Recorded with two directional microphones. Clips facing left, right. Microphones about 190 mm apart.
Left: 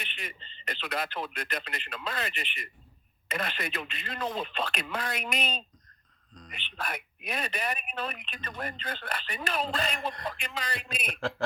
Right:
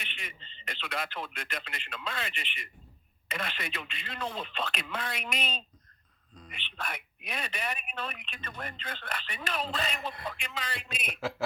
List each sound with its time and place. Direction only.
0.0 s a sound: 40° left (ahead or behind)
0.6 s speech: 40° left (ahead or behind)
10.8 s a man's voice: 5° right (ahead or behind)